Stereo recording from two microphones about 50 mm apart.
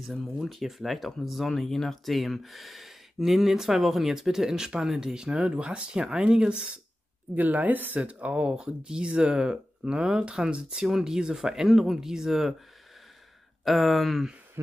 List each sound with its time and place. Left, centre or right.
0.4 s speech: centre
5.4 s speech: right
7.3 s a woman's voice: right; by 12.5 s centre
13.7 s speech: centre